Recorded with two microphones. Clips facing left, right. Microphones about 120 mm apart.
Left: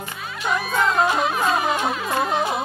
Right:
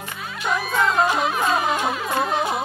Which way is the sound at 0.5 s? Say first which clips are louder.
Even; centre (ahead or behind).